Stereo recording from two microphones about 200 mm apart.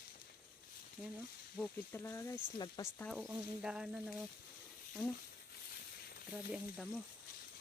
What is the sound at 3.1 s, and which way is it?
Speech, 5° right (ahead or behind).